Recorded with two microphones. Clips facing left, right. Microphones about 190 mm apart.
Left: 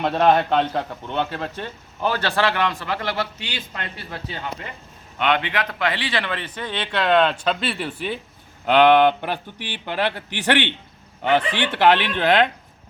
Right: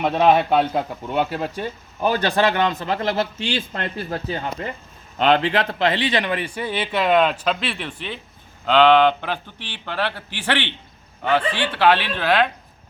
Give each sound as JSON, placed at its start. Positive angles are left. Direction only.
{"t": 0.0, "sound": "a man's voice", "side_deg": -5}